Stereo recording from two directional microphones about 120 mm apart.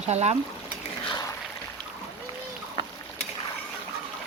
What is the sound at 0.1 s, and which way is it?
Speech, 65° right (ahead or behind).